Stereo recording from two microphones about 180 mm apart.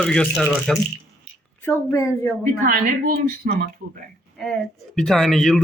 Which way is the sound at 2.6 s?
50° right (ahead or behind).